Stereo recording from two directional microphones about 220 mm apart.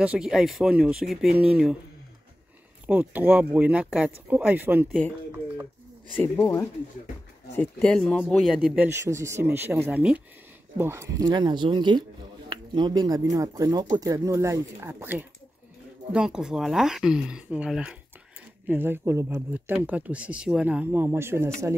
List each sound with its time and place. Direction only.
0.0 s speech: 5° right (ahead or behind)
2.9 s speech: 5° right (ahead or behind)
6.1 s speech: 15° left (ahead or behind); by 21.7 s 10° right (ahead or behind)